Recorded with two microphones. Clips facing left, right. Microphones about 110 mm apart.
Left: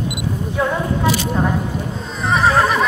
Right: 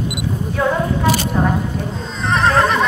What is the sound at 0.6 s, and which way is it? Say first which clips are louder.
Neigh: right 2 dB; centre (ahead or behind).